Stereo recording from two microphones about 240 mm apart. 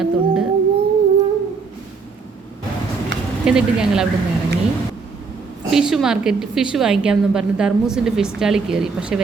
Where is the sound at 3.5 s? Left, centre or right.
Centre.